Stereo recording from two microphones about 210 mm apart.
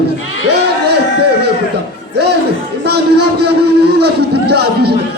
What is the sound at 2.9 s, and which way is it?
A man's voice, 50° right (ahead or behind).